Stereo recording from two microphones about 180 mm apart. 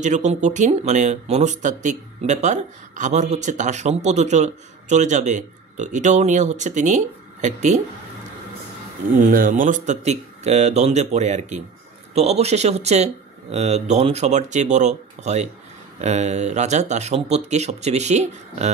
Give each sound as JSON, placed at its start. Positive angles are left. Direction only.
{"t": 0.0, "sound": "speech", "side_deg": -40}
{"t": 9.2, "sound": "speech", "side_deg": -50}